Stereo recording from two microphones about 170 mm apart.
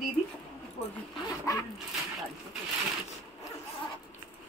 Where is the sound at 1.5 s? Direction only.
20° left (ahead or behind).